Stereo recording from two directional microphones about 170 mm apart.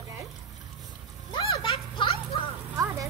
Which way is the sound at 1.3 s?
30° left (ahead or behind).